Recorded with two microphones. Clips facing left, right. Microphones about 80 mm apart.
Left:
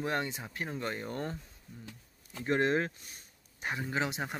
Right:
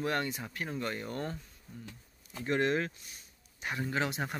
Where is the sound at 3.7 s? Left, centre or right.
Centre.